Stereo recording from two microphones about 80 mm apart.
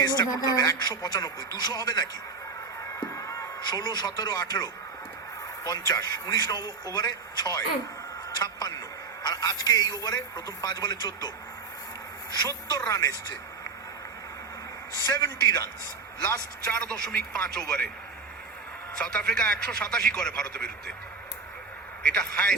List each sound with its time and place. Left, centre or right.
0.0 s a man's voice: left
3.2 s a sound: left
3.6 s a man's voice: left
12.5 s a man's voice: left
15.0 s a man's voice: left
16.2 s a man's voice: left
17.5 s a man's voice: centre
18.9 s a man's voice: centre
22.0 s a man's voice: centre